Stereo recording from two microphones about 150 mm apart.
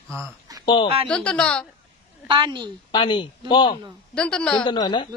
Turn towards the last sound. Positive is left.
turn(degrees=30)  # may be behind; listen again after turning